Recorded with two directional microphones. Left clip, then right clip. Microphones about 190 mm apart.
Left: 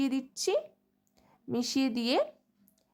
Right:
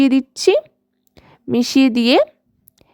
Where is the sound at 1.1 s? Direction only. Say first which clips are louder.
Right 17 dB; 45° right (ahead or behind).